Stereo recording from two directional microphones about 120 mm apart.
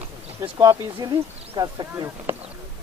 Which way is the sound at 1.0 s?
35° right (ahead or behind).